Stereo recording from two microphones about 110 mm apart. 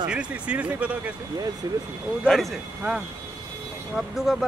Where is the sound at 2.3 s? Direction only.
Centre (ahead or behind).